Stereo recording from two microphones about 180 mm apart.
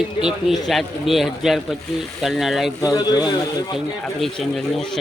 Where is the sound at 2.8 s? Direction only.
20° left (ahead or behind).